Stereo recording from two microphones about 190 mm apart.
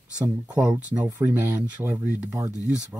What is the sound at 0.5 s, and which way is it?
Speech, 5° right (ahead or behind).